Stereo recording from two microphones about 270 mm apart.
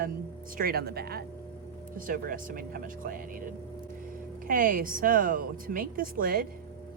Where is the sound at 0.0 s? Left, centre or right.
Right.